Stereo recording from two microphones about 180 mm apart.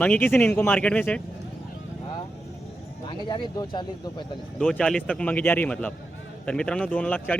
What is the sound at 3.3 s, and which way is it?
Speech, 25° left (ahead or behind).